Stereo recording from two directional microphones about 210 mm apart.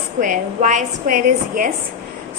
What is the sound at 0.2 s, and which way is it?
A woman's voice, 35° right (ahead or behind).